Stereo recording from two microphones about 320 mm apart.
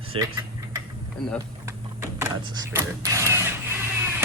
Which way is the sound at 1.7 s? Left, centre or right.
Centre.